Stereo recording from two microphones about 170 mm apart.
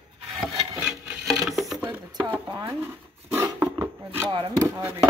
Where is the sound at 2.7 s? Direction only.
15° right (ahead or behind).